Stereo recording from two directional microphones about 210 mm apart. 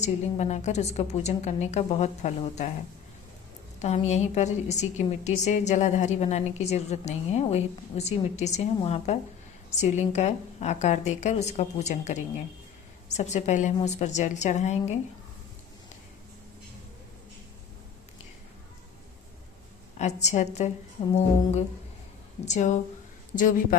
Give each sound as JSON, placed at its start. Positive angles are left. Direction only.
{"t": 0.0, "sound": "a woman's voice", "side_deg": 30}
{"t": 3.8, "sound": "a woman's voice", "side_deg": 30}
{"t": 20.0, "sound": "a woman's voice", "side_deg": 35}
{"t": 22.4, "sound": "a woman's voice", "side_deg": 35}